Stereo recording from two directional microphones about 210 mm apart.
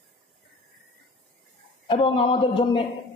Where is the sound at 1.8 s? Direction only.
25° left (ahead or behind).